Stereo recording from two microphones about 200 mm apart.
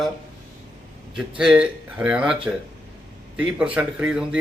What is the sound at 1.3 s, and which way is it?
A man's voice, 5° right (ahead or behind).